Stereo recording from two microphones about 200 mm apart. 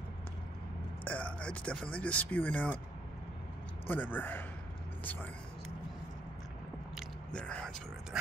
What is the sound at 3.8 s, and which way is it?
Speech, 10° left (ahead or behind).